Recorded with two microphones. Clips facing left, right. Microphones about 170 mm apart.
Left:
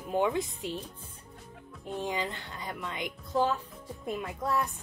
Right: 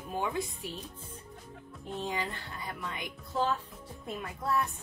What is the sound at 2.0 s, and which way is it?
A woman's voice, 20° left (ahead or behind).